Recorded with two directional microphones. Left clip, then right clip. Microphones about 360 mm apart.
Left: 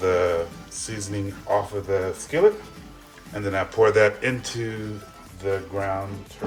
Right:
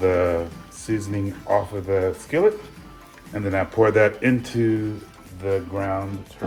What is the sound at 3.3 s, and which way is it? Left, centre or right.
Speech, centre.